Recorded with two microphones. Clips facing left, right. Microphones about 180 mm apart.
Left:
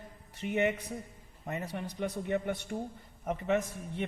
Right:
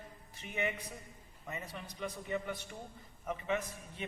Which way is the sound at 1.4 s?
45° left (ahead or behind).